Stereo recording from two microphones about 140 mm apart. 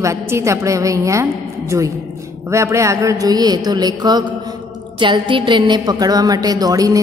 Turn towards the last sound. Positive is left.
turn(degrees=-25)  # may be behind; listen again after turning